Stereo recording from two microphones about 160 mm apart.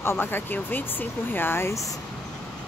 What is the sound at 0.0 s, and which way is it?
Speech, 15° left (ahead or behind).